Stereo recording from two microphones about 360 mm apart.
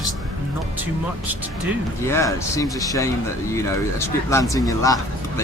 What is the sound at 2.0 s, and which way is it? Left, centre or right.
Speech, centre.